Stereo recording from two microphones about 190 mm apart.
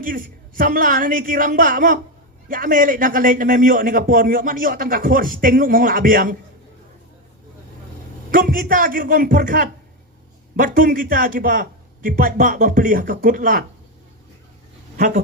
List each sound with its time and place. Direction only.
0.0 s a man's voice: 45° right (ahead or behind)
8.3 s a man's voice: 45° right (ahead or behind)
14.9 s speech: 40° right (ahead or behind)